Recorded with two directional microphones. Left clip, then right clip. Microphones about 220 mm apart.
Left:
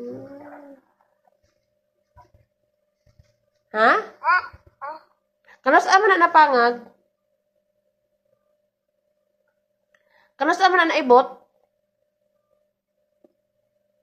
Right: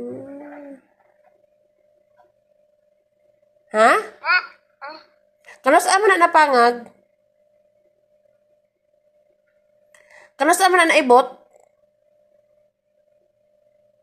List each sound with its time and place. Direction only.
0.4 s dog: 15° right (ahead or behind)
3.6 s speech: 55° right (ahead or behind)
4.2 s a sound: 20° right (ahead or behind)
5.4 s a woman's voice: 55° right (ahead or behind)
9.9 s speech: 60° right (ahead or behind)